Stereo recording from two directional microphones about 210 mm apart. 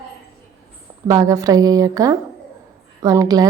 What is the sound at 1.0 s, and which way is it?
Speech, 15° right (ahead or behind).